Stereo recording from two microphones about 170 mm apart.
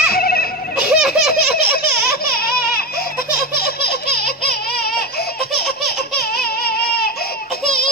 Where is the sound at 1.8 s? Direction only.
65° left (ahead or behind).